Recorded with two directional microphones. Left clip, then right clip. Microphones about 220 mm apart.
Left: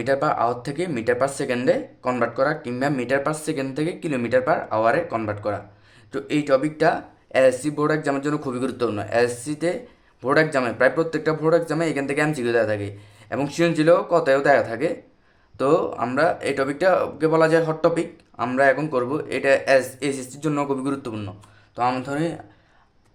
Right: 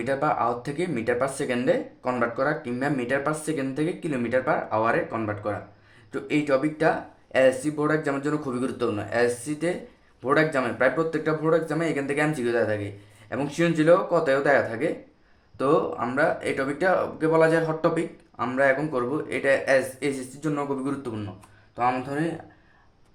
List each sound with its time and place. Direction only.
0.0 s speech: 30° left (ahead or behind)